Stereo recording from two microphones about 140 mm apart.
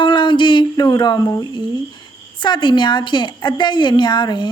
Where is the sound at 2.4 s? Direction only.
30° left (ahead or behind).